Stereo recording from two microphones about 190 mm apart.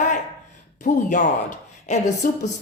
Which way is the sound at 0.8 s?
40° left (ahead or behind).